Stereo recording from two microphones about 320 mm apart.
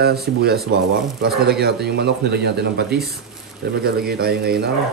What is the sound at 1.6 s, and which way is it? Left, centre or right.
Speech, right.